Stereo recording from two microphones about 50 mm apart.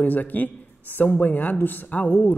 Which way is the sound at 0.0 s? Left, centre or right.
Left.